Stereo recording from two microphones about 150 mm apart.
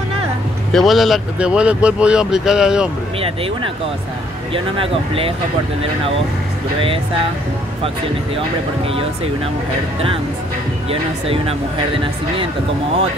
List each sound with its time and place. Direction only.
0.7 s speech: centre (ahead or behind)
4.7 s speech: 40° right (ahead or behind)
10.9 s speech: 40° right (ahead or behind)